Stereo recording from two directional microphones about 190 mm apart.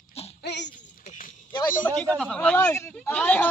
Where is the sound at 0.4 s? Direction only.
65° left (ahead or behind).